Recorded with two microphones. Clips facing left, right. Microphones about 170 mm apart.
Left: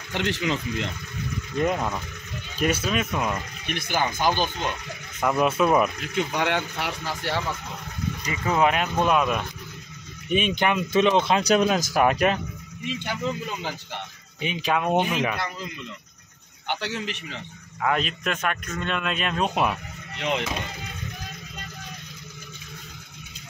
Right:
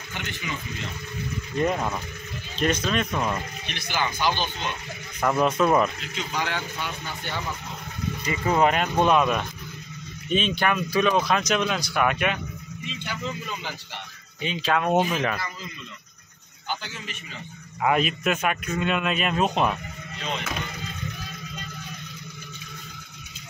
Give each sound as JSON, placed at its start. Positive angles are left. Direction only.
{"t": 0.1, "sound": "speech", "side_deg": 80}
{"t": 1.6, "sound": "speech", "side_deg": 0}
{"t": 3.6, "sound": "speech", "side_deg": 50}
{"t": 5.2, "sound": "speech", "side_deg": 5}
{"t": 6.1, "sound": "speech", "side_deg": 65}
{"t": 8.3, "sound": "speech", "side_deg": 0}
{"t": 10.3, "sound": "speech", "side_deg": 15}
{"t": 11.5, "sound": "speech", "side_deg": 40}
{"t": 14.4, "sound": "speech", "side_deg": 15}
{"t": 14.9, "sound": "speech", "side_deg": 0}
{"t": 16.6, "sound": "speech", "side_deg": 75}
{"t": 17.8, "sound": "a man's voice", "side_deg": -5}
{"t": 20.2, "sound": "speech", "side_deg": 75}